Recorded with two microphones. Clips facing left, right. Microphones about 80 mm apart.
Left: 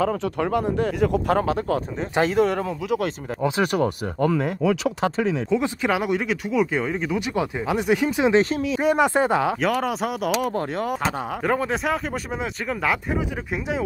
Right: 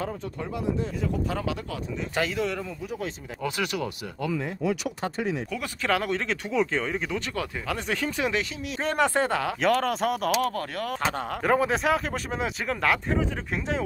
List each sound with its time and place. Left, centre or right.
0.1 s speech: left
1.4 s speech: left
3.3 s speech: left
3.6 s speech: left
5.5 s speech: centre
9.6 s speech: centre
10.5 s speech: left
11.0 s speech: centre